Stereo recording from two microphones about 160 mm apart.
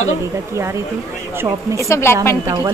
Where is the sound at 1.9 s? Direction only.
15° left (ahead or behind).